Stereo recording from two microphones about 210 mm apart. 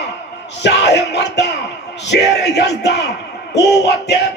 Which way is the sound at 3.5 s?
55° left (ahead or behind).